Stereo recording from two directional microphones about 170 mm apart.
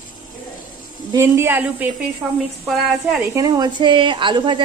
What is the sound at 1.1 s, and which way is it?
Speech, 15° right (ahead or behind).